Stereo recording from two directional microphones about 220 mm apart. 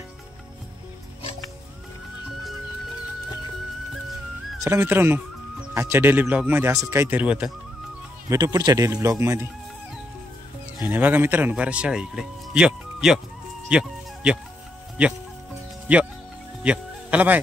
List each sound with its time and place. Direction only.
4.6 s speech: 10° right (ahead or behind)
8.3 s speech: 15° right (ahead or behind)
10.9 s speech: 10° right (ahead or behind)
13.7 s music: 5° right (ahead or behind)
16.6 s speech: 5° right (ahead or behind)